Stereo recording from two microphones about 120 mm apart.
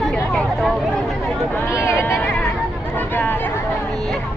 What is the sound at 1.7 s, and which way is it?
Speech, 25° left (ahead or behind).